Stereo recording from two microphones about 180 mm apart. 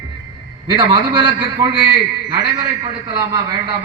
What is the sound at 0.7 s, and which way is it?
A man's voice, 25° right (ahead or behind).